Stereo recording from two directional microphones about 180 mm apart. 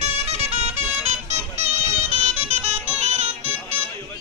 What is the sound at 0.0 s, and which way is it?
Music, 35° right (ahead or behind).